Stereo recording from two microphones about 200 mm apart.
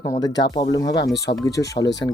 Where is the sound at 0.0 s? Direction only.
20° left (ahead or behind).